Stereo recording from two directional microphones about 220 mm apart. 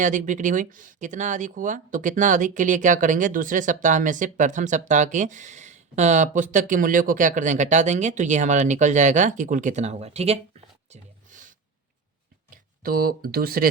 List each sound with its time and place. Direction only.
0.0 s speech: 35° right (ahead or behind)
10.8 s a sound: 35° right (ahead or behind)
12.8 s speech: 40° right (ahead or behind)